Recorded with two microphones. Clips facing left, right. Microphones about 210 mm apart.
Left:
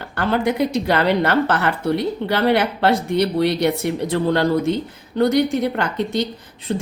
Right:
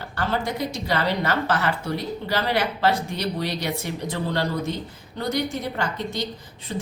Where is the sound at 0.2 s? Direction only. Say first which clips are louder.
Left 7 dB; 60° left (ahead or behind).